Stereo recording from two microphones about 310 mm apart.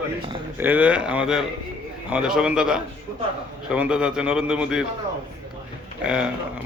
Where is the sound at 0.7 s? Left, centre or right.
Centre.